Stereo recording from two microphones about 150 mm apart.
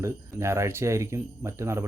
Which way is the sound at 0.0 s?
20° right (ahead or behind).